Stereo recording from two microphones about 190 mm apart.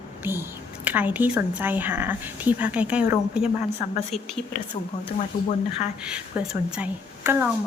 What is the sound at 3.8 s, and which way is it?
Speech, 35° left (ahead or behind).